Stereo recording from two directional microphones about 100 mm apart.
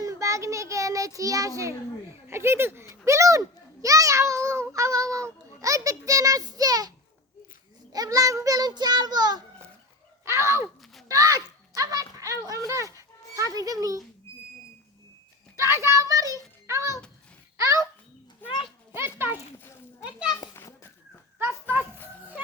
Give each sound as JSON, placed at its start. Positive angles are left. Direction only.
{"t": 0.0, "sound": "child singing", "side_deg": -30}
{"t": 2.2, "sound": "speech", "side_deg": -25}
{"t": 2.9, "sound": "a sound", "side_deg": -30}
{"t": 7.9, "sound": "a child's voice", "side_deg": -35}
{"t": 10.3, "sound": "speech", "side_deg": -25}
{"t": 15.5, "sound": "a child's voice", "side_deg": -30}
{"t": 18.4, "sound": "children playing", "side_deg": 20}
{"t": 18.9, "sound": "speech", "side_deg": -20}
{"t": 21.3, "sound": "a sound", "side_deg": -20}
{"t": 21.9, "sound": "children playing", "side_deg": 20}